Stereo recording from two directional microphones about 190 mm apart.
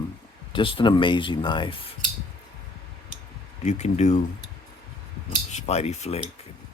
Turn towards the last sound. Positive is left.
turn(degrees=35)  # may be behind; listen again after turning